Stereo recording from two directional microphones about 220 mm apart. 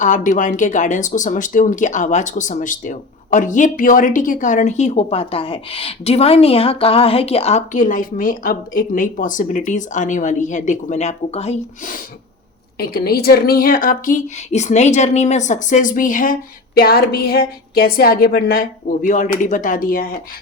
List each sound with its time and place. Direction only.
0.0 s speech: 35° left (ahead or behind)
12.8 s speech: 45° left (ahead or behind)